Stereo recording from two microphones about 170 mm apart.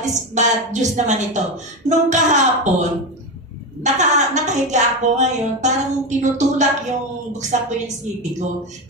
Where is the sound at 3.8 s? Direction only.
45° right (ahead or behind).